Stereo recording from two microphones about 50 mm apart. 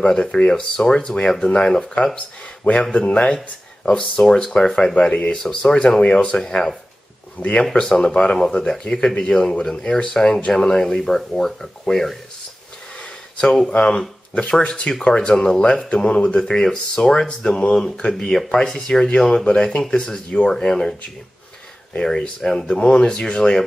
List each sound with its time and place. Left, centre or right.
0.0 s speech: centre
2.1 s speech: left
7.3 s speech: left
7.8 s speech: centre
13.7 s speech: left
22.0 s speech: centre